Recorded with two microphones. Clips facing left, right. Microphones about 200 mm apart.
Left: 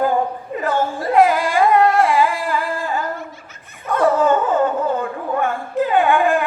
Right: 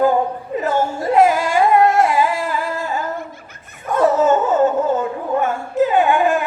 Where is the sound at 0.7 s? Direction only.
45° right (ahead or behind).